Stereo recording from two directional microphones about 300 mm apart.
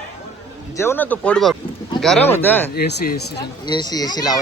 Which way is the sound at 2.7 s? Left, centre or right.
Left.